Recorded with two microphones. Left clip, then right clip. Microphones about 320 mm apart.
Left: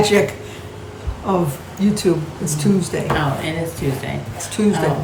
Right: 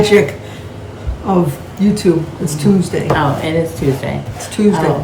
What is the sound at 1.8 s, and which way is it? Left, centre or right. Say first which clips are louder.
Speech: right 5 dB; centre.